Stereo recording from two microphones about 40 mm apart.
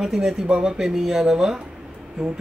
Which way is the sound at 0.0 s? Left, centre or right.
Centre.